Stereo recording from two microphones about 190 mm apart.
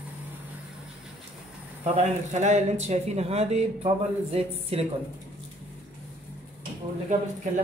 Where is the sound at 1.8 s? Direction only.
35° right (ahead or behind).